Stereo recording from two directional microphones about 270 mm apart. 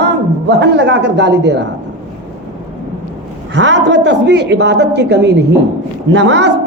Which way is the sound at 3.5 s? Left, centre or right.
Right.